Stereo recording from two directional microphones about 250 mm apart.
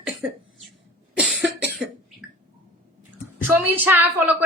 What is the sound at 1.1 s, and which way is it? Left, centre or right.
Cough, centre.